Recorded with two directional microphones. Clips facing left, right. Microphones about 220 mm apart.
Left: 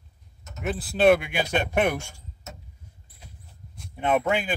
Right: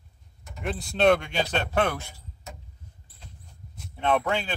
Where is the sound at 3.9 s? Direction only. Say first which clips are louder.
Left 2 dB; 15° left (ahead or behind).